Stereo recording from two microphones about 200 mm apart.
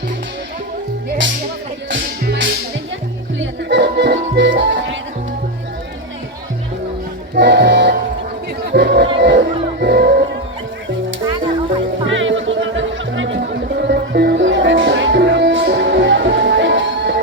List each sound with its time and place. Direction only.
1.9 s music: 70° right (ahead or behind)
7.3 s music: 60° right (ahead or behind)
8.7 s a sound: 60° right (ahead or behind)
9.1 s music: 60° right (ahead or behind)
12.0 s music: 70° right (ahead or behind)